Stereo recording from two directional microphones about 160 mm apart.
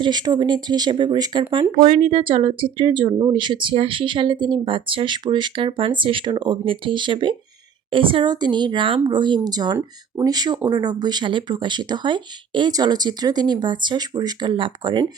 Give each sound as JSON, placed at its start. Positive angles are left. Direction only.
{"t": 0.0, "sound": "speech", "side_deg": -25}